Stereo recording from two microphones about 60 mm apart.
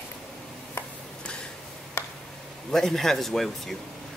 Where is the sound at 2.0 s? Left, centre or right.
Left.